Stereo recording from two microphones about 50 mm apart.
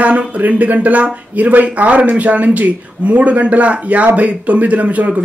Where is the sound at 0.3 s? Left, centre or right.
Right.